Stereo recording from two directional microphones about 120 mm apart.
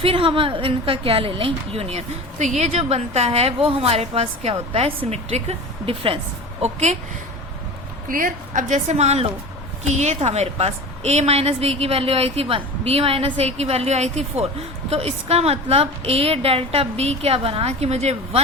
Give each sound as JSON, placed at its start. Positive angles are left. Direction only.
{"t": 0.0, "sound": "a woman's voice", "side_deg": -50}
{"t": 6.6, "sound": "a woman's voice", "side_deg": -70}
{"t": 8.5, "sound": "a woman's voice", "side_deg": -85}